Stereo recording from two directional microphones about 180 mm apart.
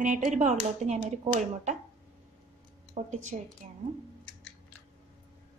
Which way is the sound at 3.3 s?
35° right (ahead or behind).